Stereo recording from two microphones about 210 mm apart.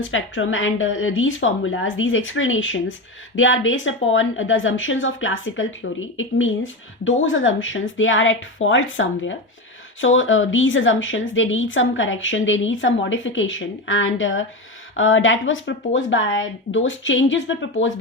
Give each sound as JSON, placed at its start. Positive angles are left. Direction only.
{"t": 0.0, "sound": "a woman's voice", "side_deg": 70}